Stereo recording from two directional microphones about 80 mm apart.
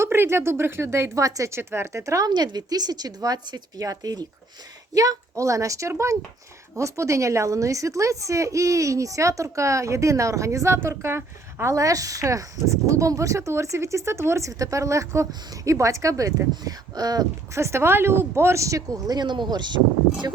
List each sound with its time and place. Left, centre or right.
0.0 s a woman's voice: right
2.3 s a woman's voice: right
11.7 s a woman's voice: right
17.5 s a woman's voice: right
19.1 s speech: right